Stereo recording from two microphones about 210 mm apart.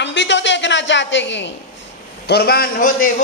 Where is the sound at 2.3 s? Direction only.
50° left (ahead or behind).